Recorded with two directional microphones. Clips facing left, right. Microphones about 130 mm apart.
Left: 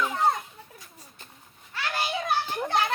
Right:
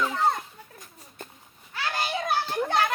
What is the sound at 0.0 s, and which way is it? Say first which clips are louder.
Children playing: even; 15° left (ahead or behind).